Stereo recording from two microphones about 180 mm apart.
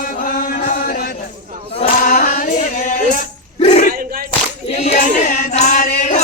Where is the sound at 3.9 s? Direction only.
55° right (ahead or behind).